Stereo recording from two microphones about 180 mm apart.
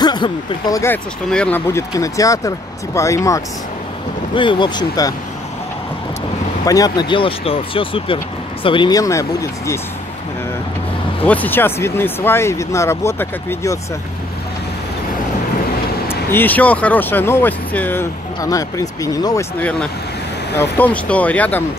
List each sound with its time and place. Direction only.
0.0 s speech: 25° left (ahead or behind)
1.3 s speech: 10° left (ahead or behind)
6.6 s speech: 20° left (ahead or behind)
11.2 s speech: 10° left (ahead or behind)
16.1 s speech: 10° left (ahead or behind)
20.5 s speech: 10° left (ahead or behind)